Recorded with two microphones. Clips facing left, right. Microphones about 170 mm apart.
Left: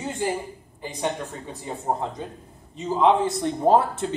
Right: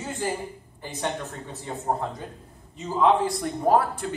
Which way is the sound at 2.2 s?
20° left (ahead or behind).